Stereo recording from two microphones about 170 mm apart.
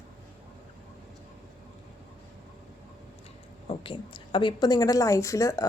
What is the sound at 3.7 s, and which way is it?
A woman's voice, 30° left (ahead or behind).